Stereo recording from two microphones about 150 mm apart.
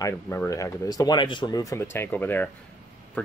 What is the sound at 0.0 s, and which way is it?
Speech, 20° left (ahead or behind).